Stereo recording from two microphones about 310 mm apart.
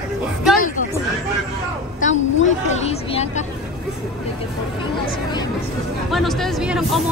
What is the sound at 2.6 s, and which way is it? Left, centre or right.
Speech, left.